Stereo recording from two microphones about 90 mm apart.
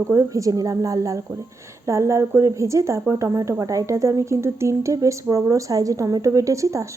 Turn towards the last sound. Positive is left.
turn(degrees=-35)  # may be behind; listen again after turning